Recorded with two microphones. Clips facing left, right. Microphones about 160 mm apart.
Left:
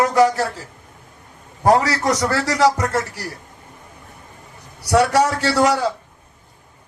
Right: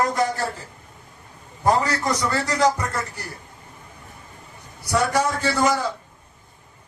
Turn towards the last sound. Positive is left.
turn(degrees=75)  # may be behind; listen again after turning